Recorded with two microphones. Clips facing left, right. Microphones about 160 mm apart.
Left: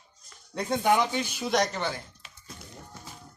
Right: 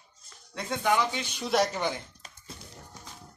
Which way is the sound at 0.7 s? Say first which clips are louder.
Left 2 dB; 45° left (ahead or behind).